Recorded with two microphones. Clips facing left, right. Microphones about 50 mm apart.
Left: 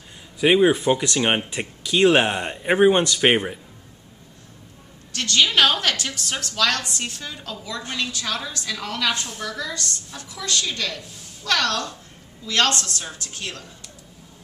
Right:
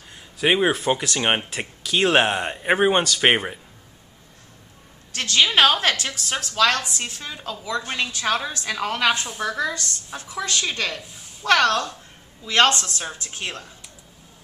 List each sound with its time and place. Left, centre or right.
0.4 s speech: centre
5.1 s a woman's voice: right